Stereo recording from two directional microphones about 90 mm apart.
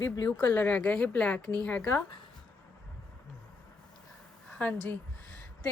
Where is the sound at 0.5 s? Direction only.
15° left (ahead or behind).